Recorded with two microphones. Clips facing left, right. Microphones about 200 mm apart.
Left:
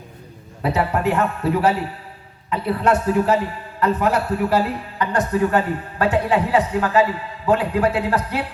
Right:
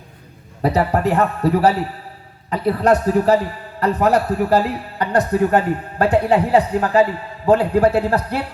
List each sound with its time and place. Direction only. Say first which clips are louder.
0.6 s a man's voice: right 3 dB; 35° right (ahead or behind)